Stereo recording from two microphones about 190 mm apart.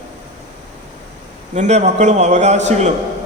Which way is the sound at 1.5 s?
35° right (ahead or behind).